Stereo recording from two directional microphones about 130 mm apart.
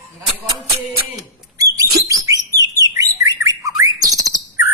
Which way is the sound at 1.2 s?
25° right (ahead or behind).